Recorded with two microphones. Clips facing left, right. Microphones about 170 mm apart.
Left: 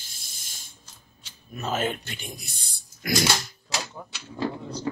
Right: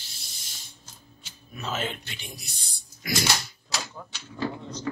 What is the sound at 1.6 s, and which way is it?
Speech, 45° left (ahead or behind).